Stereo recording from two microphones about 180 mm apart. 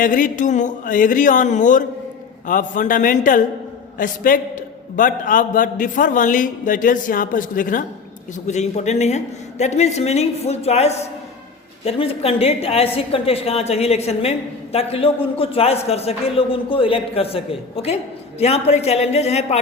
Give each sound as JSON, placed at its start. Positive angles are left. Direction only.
{"t": 0.0, "sound": "a man's voice", "side_deg": 50}